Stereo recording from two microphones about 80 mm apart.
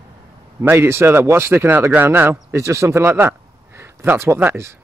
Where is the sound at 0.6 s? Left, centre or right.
Right.